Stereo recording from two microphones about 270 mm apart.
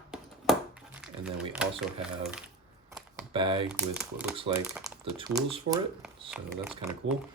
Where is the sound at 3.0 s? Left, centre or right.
Centre.